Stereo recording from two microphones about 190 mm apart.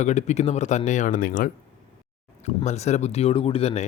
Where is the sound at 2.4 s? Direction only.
35° left (ahead or behind).